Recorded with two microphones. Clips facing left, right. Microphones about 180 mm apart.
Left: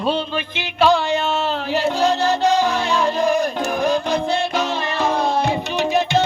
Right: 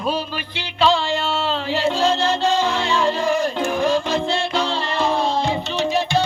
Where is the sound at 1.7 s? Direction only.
15° left (ahead or behind).